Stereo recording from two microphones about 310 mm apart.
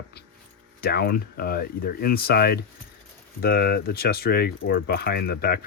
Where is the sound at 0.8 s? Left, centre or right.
Left.